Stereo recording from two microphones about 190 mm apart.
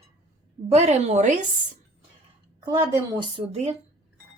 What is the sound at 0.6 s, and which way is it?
Speech, 35° right (ahead or behind).